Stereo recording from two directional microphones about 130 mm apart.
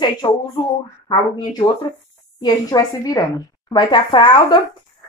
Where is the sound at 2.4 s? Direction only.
30° left (ahead or behind).